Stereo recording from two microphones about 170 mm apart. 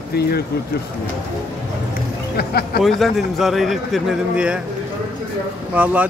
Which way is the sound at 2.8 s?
Centre (ahead or behind).